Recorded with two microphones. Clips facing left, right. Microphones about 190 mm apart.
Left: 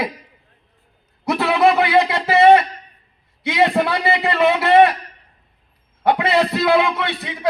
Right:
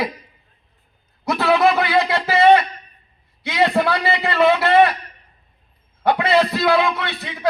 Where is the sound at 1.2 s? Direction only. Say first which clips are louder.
Left 1 dB; 25° left (ahead or behind).